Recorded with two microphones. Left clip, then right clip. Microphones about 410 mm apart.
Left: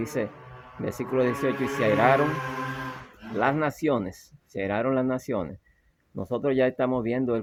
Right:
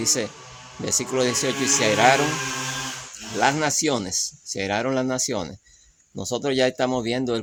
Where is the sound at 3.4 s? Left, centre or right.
Left.